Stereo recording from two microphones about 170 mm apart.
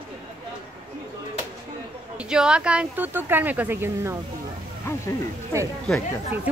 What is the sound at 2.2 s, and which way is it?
Speech, 5° right (ahead or behind).